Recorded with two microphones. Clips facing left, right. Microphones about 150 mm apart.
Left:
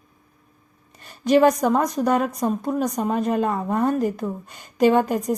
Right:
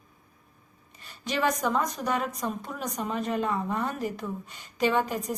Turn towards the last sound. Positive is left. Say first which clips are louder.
# left 8 dB
turn(degrees=45)  # may be behind; listen again after turning